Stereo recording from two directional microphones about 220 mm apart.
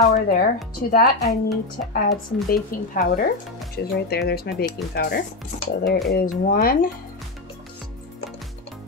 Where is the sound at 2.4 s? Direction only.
40° left (ahead or behind).